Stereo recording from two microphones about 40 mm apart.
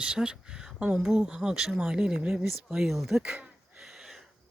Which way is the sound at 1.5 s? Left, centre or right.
Centre.